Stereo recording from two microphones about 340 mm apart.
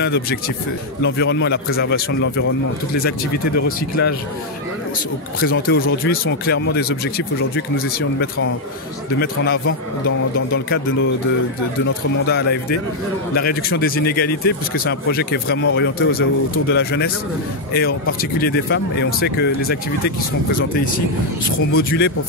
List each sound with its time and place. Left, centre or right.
0.0 s speech: left
5.4 s speech: left
9.2 s speech: left
11.8 s speech: left
21.5 s speech: left